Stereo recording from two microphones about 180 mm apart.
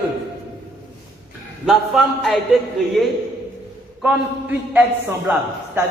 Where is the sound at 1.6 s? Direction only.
Centre (ahead or behind).